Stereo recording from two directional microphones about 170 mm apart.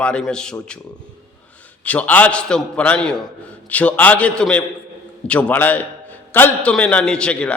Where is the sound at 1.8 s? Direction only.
10° left (ahead or behind).